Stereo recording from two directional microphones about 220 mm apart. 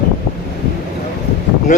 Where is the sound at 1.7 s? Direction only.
35° left (ahead or behind).